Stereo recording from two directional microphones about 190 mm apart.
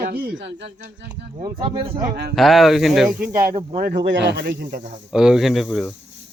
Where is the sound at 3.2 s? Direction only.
50° right (ahead or behind).